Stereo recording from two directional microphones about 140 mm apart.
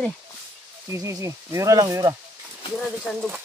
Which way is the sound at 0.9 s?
25° right (ahead or behind).